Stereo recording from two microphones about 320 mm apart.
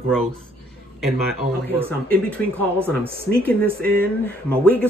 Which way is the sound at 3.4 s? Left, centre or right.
Right.